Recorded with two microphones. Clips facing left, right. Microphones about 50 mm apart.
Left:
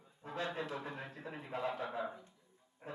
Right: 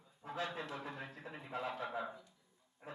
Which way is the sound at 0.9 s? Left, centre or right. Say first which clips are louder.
Left 2 dB; centre.